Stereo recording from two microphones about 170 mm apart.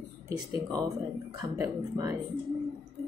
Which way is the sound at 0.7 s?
20° right (ahead or behind).